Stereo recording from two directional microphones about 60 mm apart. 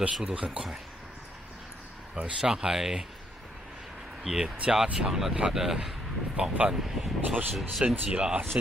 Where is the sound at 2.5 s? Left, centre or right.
Centre.